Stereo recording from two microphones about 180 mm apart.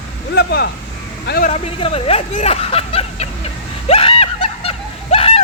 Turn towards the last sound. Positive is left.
turn(degrees=35)  # may be behind; listen again after turning